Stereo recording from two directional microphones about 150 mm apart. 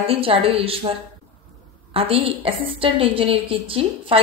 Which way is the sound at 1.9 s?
40° right (ahead or behind).